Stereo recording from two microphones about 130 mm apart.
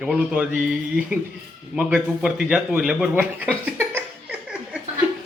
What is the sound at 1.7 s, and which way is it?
Speech, 5° right (ahead or behind).